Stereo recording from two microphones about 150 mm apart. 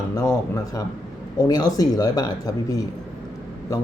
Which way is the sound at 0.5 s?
25° left (ahead or behind).